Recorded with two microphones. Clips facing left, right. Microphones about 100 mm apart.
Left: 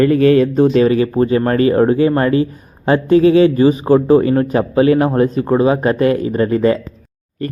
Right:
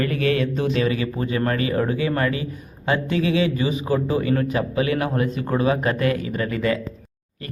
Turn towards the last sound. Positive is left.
turn(degrees=40)  # may be behind; listen again after turning